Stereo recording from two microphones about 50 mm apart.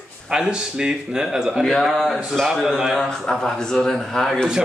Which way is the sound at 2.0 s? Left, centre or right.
Centre.